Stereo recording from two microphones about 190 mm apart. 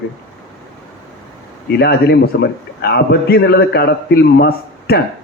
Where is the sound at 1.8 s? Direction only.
55° left (ahead or behind).